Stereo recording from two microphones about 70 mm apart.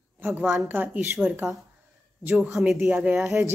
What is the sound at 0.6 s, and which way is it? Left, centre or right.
Speech, right.